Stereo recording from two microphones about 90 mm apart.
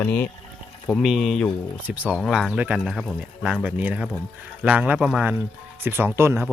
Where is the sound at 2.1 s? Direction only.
5° right (ahead or behind).